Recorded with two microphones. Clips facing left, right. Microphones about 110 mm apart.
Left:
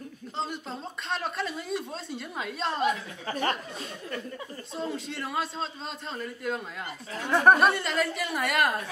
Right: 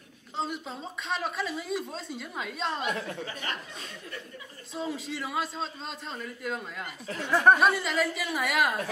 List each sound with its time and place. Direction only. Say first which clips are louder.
0.4 s speech: even; centre (ahead or behind)
4.7 s speech: even; centre (ahead or behind)
7.2 s speech: left 1 dB; 15° left (ahead or behind)
7.5 s speech: left 1 dB; centre (ahead or behind)